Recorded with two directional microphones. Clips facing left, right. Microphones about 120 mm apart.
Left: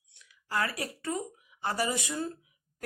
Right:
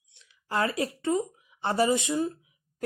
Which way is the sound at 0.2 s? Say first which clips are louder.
Right 4 dB; 25° right (ahead or behind).